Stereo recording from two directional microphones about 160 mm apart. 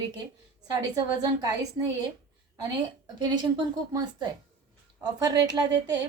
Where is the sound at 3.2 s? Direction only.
25° right (ahead or behind).